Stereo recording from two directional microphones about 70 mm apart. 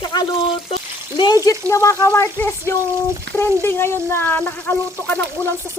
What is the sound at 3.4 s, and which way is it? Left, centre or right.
Speech, left.